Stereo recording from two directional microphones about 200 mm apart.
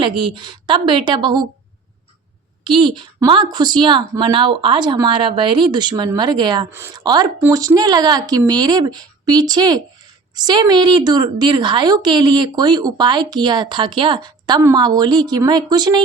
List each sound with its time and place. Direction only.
0.0 s a woman's voice: 25° right (ahead or behind)
2.6 s a woman's voice: 25° right (ahead or behind)
6.7 s a woman's voice: 10° right (ahead or behind)